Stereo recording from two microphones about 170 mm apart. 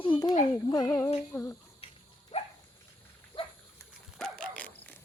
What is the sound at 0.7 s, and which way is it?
Female singing, 20° left (ahead or behind).